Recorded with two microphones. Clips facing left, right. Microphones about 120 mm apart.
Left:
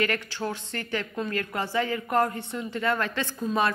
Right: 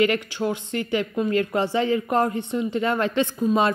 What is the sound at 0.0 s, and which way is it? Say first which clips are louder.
Speech: right 6 dB; 15° right (ahead or behind).